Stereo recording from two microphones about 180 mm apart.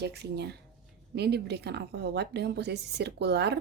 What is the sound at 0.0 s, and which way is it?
A woman's voice, 65° right (ahead or behind).